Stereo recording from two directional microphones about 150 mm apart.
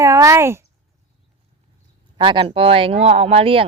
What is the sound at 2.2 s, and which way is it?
Speech, 35° right (ahead or behind).